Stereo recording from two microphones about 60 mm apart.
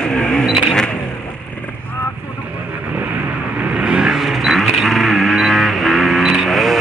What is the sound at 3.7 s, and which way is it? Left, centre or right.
Vehicle, centre.